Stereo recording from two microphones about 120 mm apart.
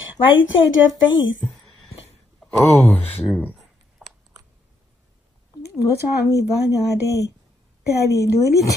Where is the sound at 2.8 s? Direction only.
15° left (ahead or behind).